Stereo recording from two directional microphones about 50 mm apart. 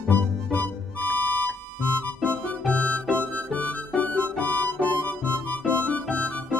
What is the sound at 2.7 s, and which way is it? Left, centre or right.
Music, left.